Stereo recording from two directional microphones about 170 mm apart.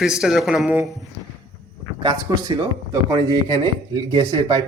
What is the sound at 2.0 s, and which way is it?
Speech, 25° right (ahead or behind).